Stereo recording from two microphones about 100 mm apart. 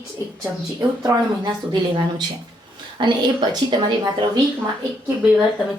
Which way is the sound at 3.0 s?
50° right (ahead or behind).